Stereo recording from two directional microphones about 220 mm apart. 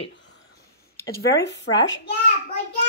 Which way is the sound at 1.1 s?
50° left (ahead or behind).